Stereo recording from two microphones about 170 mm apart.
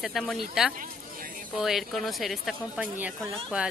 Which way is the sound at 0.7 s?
55° right (ahead or behind).